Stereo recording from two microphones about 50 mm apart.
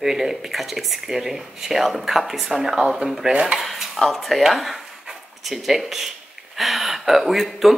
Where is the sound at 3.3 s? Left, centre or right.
Centre.